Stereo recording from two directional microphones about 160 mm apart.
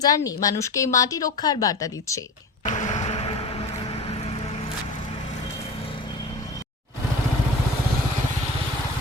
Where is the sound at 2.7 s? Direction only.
45° left (ahead or behind).